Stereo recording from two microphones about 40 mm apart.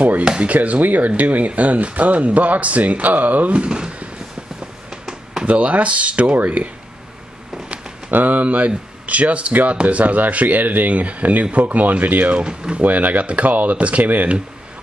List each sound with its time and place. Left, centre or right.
0.2 s speech: centre
0.5 s speech: right
3.5 s speech: right
5.4 s speech: right
8.1 s speech: right
9.5 s speech: right
9.8 s speech: right
12.4 s speech: right
12.8 s speech: right